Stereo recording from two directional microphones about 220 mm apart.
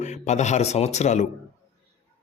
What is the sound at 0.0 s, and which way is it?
A man's voice, 30° left (ahead or behind).